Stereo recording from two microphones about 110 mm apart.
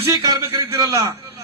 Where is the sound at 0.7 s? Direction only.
30° right (ahead or behind).